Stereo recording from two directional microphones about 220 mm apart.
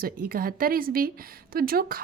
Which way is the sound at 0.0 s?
40° right (ahead or behind).